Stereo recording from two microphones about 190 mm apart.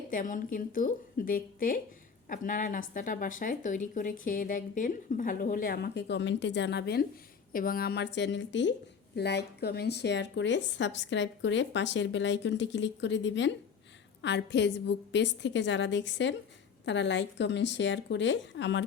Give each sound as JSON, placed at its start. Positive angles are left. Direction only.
{"t": 0.1, "sound": "speech", "side_deg": 45}
{"t": 7.5, "sound": "speech", "side_deg": 50}